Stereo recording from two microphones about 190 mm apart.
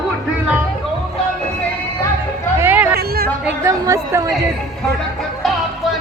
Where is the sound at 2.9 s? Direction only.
55° right (ahead or behind).